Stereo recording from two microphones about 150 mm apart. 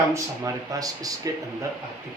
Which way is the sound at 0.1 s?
20° right (ahead or behind).